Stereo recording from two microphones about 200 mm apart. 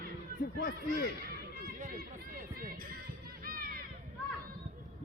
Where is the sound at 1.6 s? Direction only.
45° right (ahead or behind).